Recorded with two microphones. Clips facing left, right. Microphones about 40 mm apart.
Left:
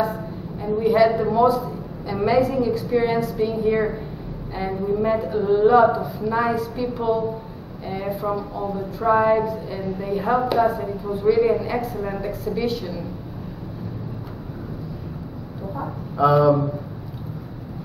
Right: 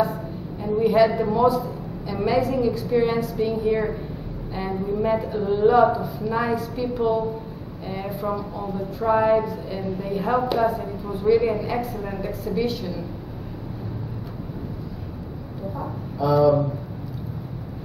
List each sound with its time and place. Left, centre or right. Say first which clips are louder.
0.0 s a sound: even; centre
1.1 s a woman's voice: left 2 dB; centre
16.2 s speech: left 2 dB; left